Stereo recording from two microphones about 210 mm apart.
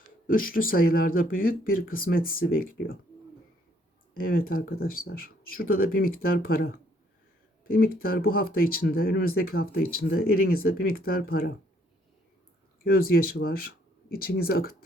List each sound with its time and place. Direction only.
0.3 s speech: 40° left (ahead or behind)
4.1 s speech: 45° left (ahead or behind)
12.8 s speech: 45° left (ahead or behind)